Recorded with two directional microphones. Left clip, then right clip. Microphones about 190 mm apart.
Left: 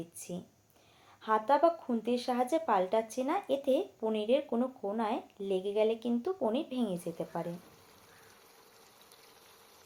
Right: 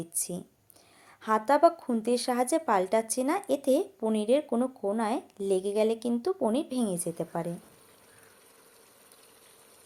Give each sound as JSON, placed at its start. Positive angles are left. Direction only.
{"t": 1.2, "sound": "speech", "side_deg": -40}